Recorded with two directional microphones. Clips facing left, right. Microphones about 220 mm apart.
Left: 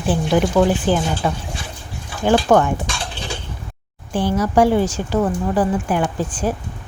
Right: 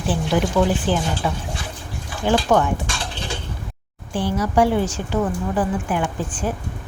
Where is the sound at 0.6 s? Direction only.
45° left (ahead or behind).